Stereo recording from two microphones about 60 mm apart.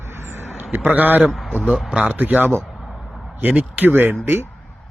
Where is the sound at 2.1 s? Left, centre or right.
Right.